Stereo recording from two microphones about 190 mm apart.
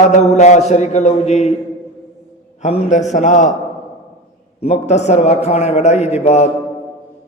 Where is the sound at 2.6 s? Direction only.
35° left (ahead or behind).